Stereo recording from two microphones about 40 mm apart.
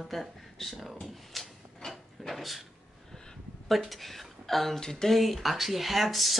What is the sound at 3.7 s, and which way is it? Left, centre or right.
A woman's voice, centre.